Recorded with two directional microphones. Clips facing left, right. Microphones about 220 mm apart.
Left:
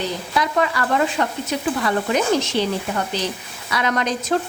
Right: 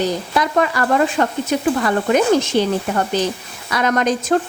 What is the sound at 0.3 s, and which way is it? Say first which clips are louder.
Speech: right 2 dB; 45° right (ahead or behind).